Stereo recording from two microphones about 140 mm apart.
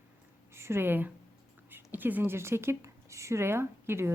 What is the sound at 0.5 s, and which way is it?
A woman's voice, 20° right (ahead or behind).